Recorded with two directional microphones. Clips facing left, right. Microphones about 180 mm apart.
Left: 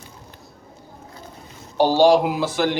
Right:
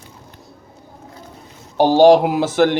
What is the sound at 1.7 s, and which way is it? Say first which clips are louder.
A man's voice: right 4 dB; 45° right (ahead or behind).